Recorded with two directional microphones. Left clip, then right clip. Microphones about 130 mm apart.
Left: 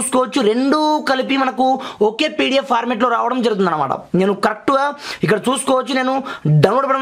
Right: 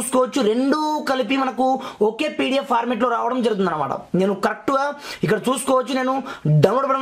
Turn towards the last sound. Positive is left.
turn(degrees=35)  # may be behind; listen again after turning